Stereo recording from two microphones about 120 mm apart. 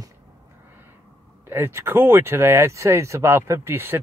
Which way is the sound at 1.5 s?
20° right (ahead or behind).